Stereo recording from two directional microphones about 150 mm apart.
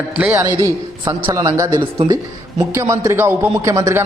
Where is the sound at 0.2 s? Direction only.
15° right (ahead or behind).